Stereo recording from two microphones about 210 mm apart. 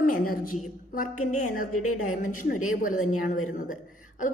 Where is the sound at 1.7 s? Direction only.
90° left.